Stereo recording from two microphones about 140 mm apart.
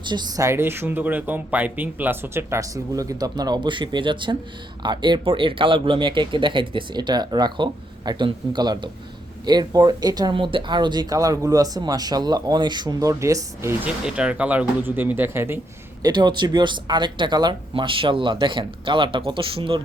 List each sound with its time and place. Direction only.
0.0 s speech: 30° right (ahead or behind)
14.0 s speech: 5° right (ahead or behind)
16.0 s speech: 30° right (ahead or behind)